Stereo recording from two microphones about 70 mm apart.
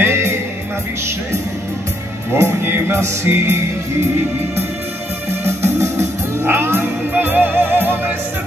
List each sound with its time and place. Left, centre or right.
0.0 s music: right
2.3 s music: right
5.4 s music: right